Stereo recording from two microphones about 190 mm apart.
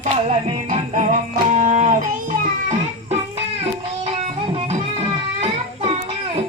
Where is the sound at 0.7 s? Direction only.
40° right (ahead or behind).